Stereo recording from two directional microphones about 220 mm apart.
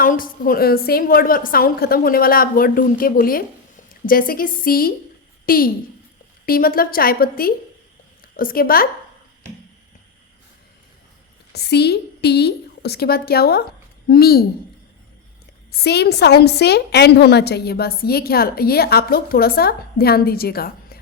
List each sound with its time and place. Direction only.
0.0 s a woman's voice: 40° left (ahead or behind)
11.5 s a woman's voice: 50° left (ahead or behind)
15.7 s a woman's voice: 45° left (ahead or behind)